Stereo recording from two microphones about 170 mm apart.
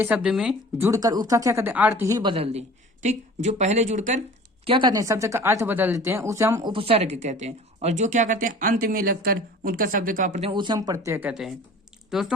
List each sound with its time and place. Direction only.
0.0 s speech: 5° right (ahead or behind)
0.9 s speech: 20° right (ahead or behind)
2.3 s speech: 35° right (ahead or behind)
4.6 s speech: 30° right (ahead or behind)
6.7 s speech: 35° right (ahead or behind)
10.5 s speech: 25° right (ahead or behind); by 12.3 s 5° right (ahead or behind)